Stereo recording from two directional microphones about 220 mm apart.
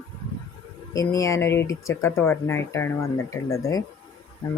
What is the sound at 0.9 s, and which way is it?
Speech, 15° left (ahead or behind).